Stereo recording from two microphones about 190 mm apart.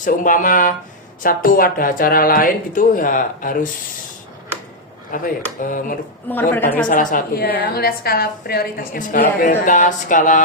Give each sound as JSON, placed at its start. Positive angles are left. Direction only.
{"t": 0.0, "sound": "a woman's voice", "side_deg": 45}
{"t": 5.1, "sound": "a woman's voice", "side_deg": 45}
{"t": 6.2, "sound": "a woman's voice", "side_deg": 10}
{"t": 6.8, "sound": "a woman's voice", "side_deg": 45}